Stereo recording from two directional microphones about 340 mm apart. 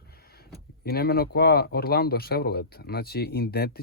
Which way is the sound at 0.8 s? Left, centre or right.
Left.